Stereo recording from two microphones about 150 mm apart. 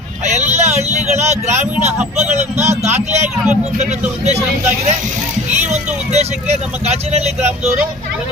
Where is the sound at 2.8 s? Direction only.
45° right (ahead or behind).